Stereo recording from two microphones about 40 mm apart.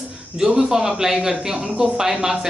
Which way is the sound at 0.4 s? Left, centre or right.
Centre.